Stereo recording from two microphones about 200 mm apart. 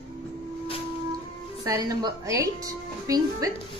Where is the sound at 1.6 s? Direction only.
15° right (ahead or behind).